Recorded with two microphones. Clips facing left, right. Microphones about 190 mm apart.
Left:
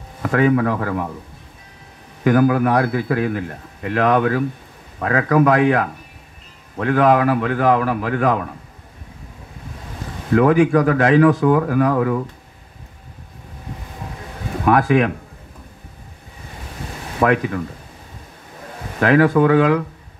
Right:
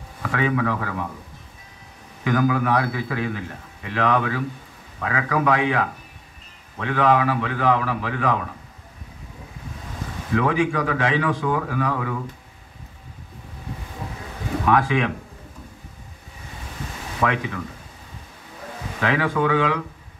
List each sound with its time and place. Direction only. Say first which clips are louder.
0.2 s a man's voice: left 7 dB; 45° left (ahead or behind)
2.2 s a man's voice: left 6 dB; 50° left (ahead or behind)
10.3 s a man's voice: left 8 dB; 45° left (ahead or behind)
14.6 s a man's voice: left 5 dB; 45° left (ahead or behind)
17.2 s a man's voice: left 7 dB; 50° left (ahead or behind)
18.9 s a man's voice: left 8 dB; 50° left (ahead or behind)